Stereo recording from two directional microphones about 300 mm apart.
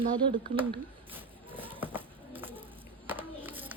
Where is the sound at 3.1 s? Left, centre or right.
Centre.